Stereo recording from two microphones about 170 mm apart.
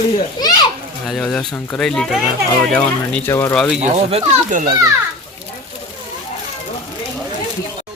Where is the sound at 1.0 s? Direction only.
Centre (ahead or behind).